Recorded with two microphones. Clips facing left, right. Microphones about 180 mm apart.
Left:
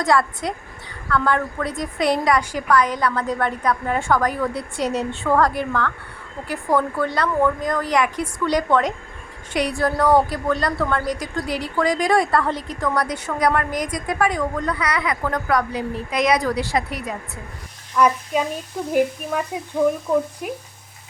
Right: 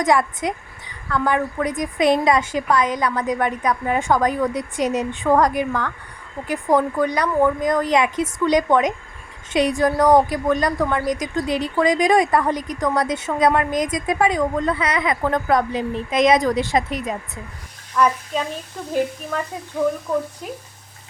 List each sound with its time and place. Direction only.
0.0 s a woman's voice: 20° right (ahead or behind)
17.9 s a child's voice: 10° left (ahead or behind)